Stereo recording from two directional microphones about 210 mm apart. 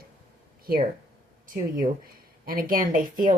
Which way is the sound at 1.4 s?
40° right (ahead or behind).